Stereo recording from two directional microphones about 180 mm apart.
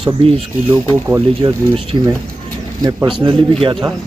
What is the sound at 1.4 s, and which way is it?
Speech, 30° right (ahead or behind).